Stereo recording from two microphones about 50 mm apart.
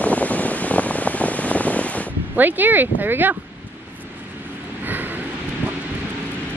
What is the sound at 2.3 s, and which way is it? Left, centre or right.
Speech, right.